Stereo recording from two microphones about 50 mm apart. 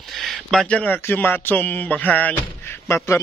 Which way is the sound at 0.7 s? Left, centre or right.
Left.